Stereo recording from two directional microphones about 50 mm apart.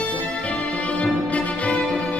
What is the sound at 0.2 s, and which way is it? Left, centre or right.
Music, left.